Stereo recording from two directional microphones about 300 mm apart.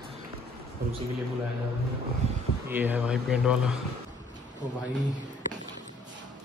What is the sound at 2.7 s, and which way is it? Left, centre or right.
Speech, centre.